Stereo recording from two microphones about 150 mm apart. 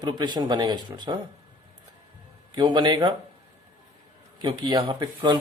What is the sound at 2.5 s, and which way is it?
Speech, 30° right (ahead or behind).